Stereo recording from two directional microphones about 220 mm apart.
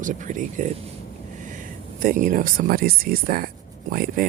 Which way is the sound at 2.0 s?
40° right (ahead or behind).